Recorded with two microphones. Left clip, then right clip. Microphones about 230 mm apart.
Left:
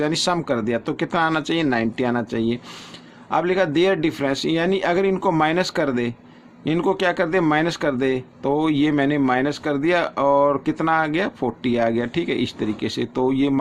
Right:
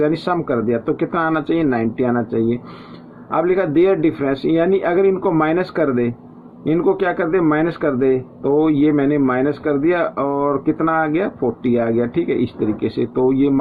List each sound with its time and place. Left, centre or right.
0.0 s speech: left